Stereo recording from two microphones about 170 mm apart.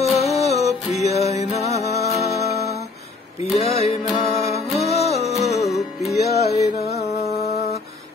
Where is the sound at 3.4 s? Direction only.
40° left (ahead or behind).